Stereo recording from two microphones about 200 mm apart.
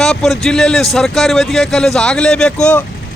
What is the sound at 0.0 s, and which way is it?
A man's voice, centre (ahead or behind).